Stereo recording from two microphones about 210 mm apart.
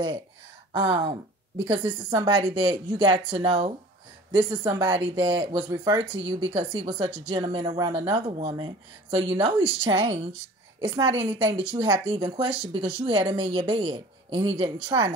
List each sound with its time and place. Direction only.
0.7 s speech: 20° right (ahead or behind)
9.8 s a woman's voice: 15° right (ahead or behind)
11.7 s speech: 25° right (ahead or behind)